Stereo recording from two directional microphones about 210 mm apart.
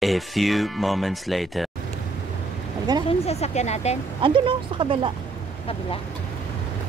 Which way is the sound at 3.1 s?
30° left (ahead or behind).